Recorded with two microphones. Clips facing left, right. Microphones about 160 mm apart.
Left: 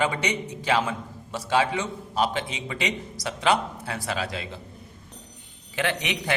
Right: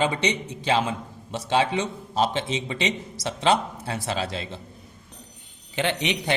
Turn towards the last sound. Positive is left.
turn(degrees=-20)  # may be behind; listen again after turning